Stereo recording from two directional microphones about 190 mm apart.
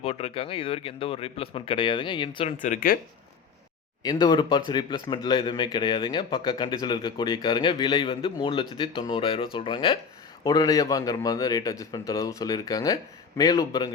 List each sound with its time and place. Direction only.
0.0 s speech: 30° left (ahead or behind)
2.6 s speech: 45° left (ahead or behind)
4.0 s a man's voice: 20° left (ahead or behind)